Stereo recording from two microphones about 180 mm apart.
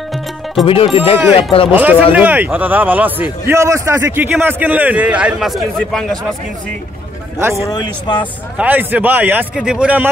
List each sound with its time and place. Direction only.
0.7 s speech: 30° left (ahead or behind)
1.7 s a man's voice: 10° right (ahead or behind)
7.3 s a man's voice: 15° right (ahead or behind)
7.6 s speech: 25° left (ahead or behind)
8.5 s a man's voice: 10° right (ahead or behind)